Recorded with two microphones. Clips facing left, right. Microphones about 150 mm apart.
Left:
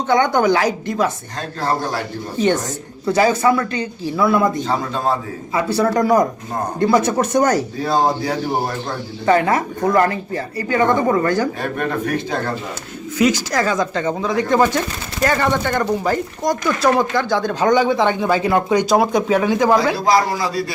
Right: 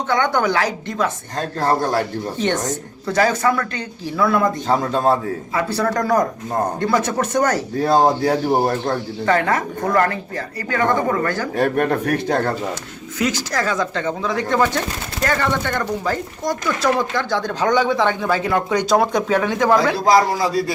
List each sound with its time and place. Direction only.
0.1 s speech: 15° left (ahead or behind)
1.4 s a man's voice: 50° right (ahead or behind)
3.1 s speech: 10° left (ahead or behind)
4.6 s a man's voice: 45° right (ahead or behind)
5.5 s speech: 10° left (ahead or behind)
7.8 s a man's voice: 50° right (ahead or behind)
9.2 s speech: 10° left (ahead or behind)
11.5 s speech: 65° right (ahead or behind)
13.1 s speech: 10° left (ahead or behind)
20.5 s a man's voice: 45° right (ahead or behind)